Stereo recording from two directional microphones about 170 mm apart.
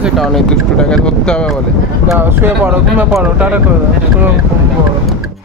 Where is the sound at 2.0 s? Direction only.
15° right (ahead or behind).